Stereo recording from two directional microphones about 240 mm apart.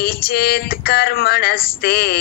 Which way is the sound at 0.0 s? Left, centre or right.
Left.